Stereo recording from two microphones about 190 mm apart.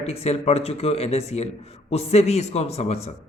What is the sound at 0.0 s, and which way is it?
A man's voice, 30° left (ahead or behind).